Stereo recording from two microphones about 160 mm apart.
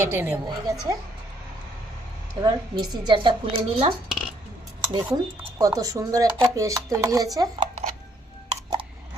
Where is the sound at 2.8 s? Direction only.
30° right (ahead or behind).